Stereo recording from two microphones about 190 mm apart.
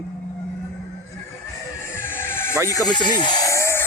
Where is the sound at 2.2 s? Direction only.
10° left (ahead or behind).